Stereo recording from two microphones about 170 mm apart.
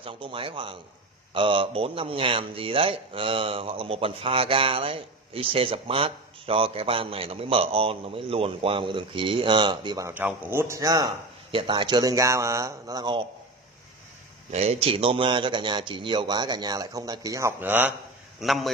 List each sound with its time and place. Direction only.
0.0 s speech: 30° right (ahead or behind)
10.1 s speech: 10° right (ahead or behind)
14.5 s speech: 40° right (ahead or behind); by 17.9 s 10° right (ahead or behind)
18.4 s a man's voice: centre (ahead or behind)